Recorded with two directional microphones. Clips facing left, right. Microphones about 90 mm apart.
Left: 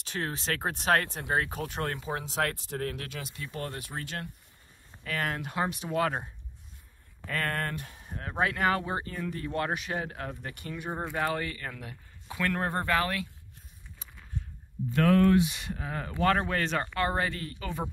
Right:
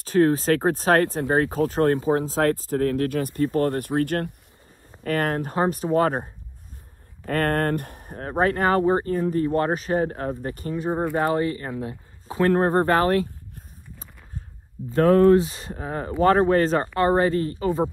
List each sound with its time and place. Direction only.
0.0 s speech: 40° right (ahead or behind)
8.2 s speech: 40° right (ahead or behind)
11.2 s a sound: 30° right (ahead or behind)
14.9 s speech: 30° right (ahead or behind)